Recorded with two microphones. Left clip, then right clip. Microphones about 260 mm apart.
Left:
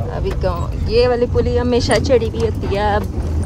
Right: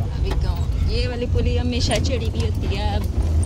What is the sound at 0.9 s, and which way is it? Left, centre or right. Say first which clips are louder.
Speech: left 14 dB; right.